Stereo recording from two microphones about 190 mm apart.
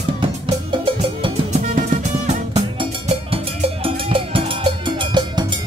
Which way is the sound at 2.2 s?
35° right (ahead or behind).